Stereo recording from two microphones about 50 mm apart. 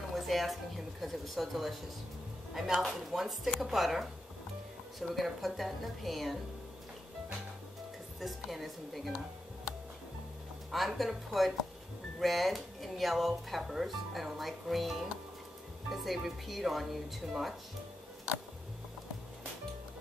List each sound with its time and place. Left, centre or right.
0.1 s a sound: centre
1.0 s speech: centre
8.2 s speech: centre
10.7 s speech: centre